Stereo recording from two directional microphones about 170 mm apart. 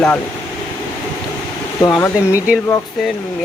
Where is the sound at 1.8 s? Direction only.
15° left (ahead or behind).